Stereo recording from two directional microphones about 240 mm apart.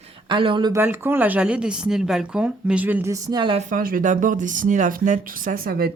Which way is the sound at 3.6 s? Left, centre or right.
Right.